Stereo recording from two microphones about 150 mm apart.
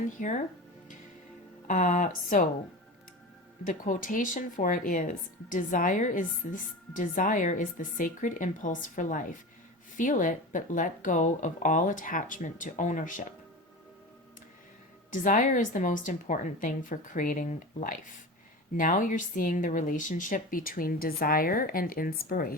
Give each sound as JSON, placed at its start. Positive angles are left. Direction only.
{"t": 0.0, "sound": "speech", "side_deg": 55}
{"t": 1.6, "sound": "speech", "side_deg": 60}
{"t": 3.7, "sound": "speech", "side_deg": 60}
{"t": 15.1, "sound": "speech", "side_deg": 60}